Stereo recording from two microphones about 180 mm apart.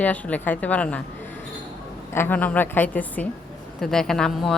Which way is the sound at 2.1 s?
10° left (ahead or behind).